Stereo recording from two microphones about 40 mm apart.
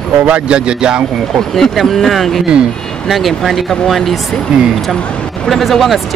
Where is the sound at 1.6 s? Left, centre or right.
Centre.